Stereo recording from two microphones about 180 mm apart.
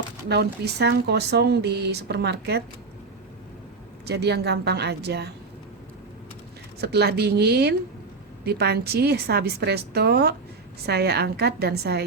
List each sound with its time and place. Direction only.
0.3 s speech: 65° right (ahead or behind)
4.0 s speech: 65° right (ahead or behind)
6.7 s a woman's voice: 65° right (ahead or behind)